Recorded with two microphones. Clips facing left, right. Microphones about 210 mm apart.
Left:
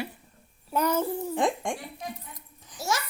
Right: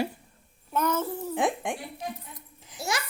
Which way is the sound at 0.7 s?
10° left (ahead or behind).